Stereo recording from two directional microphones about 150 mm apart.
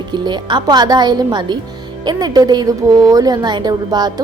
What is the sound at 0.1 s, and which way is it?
A woman's voice, 30° right (ahead or behind).